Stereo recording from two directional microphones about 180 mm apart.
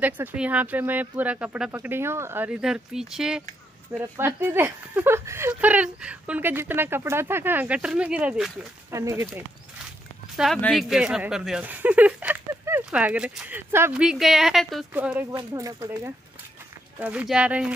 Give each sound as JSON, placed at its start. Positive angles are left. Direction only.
{"t": 0.0, "sound": "speech", "side_deg": -10}
{"t": 8.9, "sound": "speech", "side_deg": -15}
{"t": 10.3, "sound": "speech", "side_deg": 0}
{"t": 17.0, "sound": "speech", "side_deg": -5}